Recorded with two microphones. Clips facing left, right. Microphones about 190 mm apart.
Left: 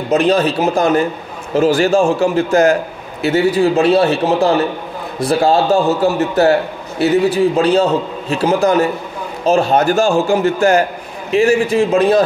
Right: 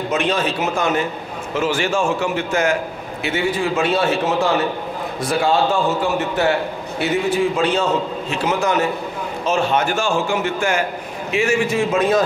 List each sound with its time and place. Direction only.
0.1 s a man's voice: 35° left (ahead or behind)